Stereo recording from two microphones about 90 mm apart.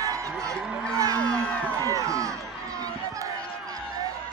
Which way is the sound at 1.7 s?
35° right (ahead or behind).